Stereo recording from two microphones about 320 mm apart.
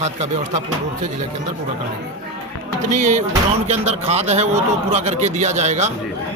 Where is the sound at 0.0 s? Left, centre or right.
Right.